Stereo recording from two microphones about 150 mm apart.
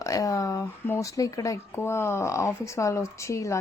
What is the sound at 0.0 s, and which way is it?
Speech, 20° left (ahead or behind).